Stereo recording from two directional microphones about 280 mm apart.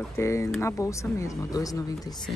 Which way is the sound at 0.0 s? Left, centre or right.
Centre.